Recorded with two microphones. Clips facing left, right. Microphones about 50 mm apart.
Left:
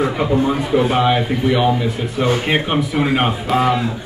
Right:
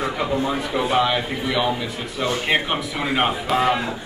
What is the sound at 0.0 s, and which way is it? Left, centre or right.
A man's voice, centre.